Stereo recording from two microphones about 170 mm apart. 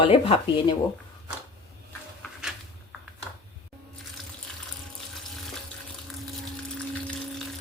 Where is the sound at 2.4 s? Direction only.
5° right (ahead or behind).